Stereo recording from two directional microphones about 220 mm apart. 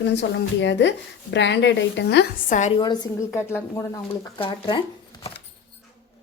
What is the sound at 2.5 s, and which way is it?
Speech, 35° left (ahead or behind).